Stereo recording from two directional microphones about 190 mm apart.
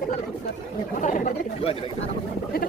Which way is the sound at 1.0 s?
45° left (ahead or behind).